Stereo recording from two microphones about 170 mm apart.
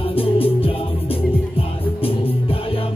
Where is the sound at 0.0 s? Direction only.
35° left (ahead or behind).